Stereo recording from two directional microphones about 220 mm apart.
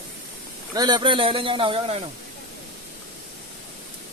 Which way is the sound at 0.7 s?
20° right (ahead or behind).